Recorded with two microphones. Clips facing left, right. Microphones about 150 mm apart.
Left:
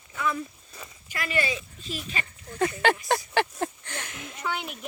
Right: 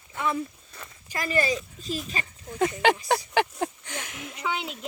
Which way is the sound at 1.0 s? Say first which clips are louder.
Right 3 dB; 35° right (ahead or behind).